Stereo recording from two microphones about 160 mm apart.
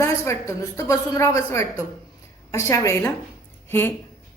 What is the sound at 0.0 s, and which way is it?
A woman's voice, 20° left (ahead or behind).